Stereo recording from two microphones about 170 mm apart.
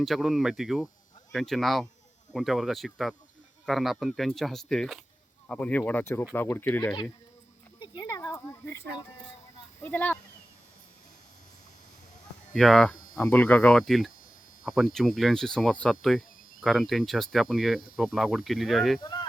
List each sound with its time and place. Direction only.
0.0 s speech: centre (ahead or behind)
7.8 s a sound: 25° left (ahead or behind)
9.8 s speech: 10° left (ahead or behind)
12.5 s speech: centre (ahead or behind)
19.0 s speech: 25° left (ahead or behind)